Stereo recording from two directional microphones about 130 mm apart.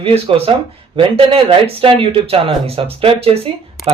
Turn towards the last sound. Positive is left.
turn(degrees=-50)  # may be behind; listen again after turning